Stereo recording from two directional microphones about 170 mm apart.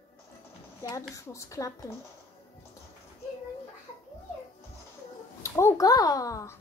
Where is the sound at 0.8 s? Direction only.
20° left (ahead or behind).